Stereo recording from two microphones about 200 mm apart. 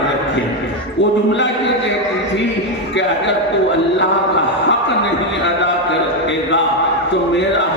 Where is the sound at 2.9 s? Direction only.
65° left (ahead or behind).